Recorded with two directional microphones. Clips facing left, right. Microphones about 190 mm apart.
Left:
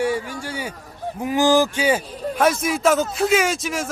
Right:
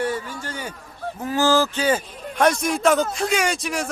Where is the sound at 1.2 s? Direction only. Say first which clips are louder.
Left 2 dB; 15° left (ahead or behind).